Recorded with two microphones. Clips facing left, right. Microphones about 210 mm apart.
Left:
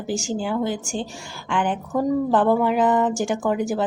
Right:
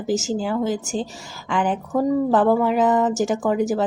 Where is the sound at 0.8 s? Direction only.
40° right (ahead or behind).